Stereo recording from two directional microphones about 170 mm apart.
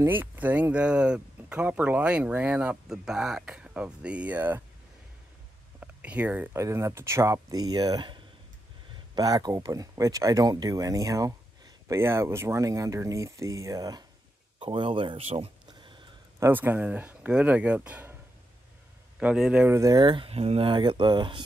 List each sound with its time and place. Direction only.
0.0 s speech: 10° right (ahead or behind)
5.8 s speech: 10° right (ahead or behind)
14.6 s a sound: 30° right (ahead or behind)
16.3 s speech: 15° right (ahead or behind)
19.1 s speech: 5° right (ahead or behind)
19.7 s speech: 20° right (ahead or behind)